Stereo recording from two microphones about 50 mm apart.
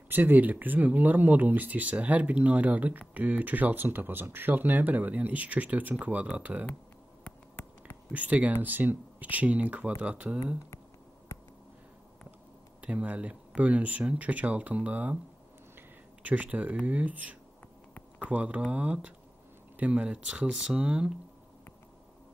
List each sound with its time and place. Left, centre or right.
0.1 s speech: right
8.1 s speech: right
12.8 s speech: right
16.2 s speech: right